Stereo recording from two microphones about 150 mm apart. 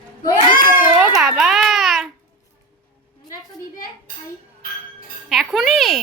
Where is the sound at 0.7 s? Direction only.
10° right (ahead or behind).